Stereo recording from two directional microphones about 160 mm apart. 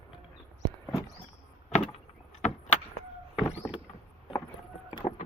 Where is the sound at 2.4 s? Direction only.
45° left (ahead or behind).